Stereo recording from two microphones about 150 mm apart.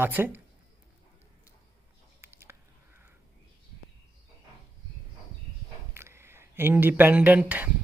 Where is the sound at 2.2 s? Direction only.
15° right (ahead or behind).